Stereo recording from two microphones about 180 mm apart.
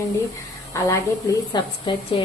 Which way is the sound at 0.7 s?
15° left (ahead or behind).